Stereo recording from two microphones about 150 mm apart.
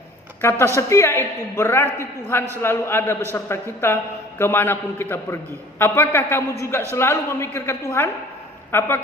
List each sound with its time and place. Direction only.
0.4 s a man's voice: 15° left (ahead or behind)